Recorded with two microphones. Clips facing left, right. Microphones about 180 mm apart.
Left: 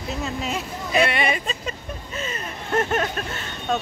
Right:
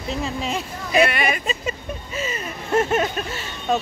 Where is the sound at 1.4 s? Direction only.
5° right (ahead or behind).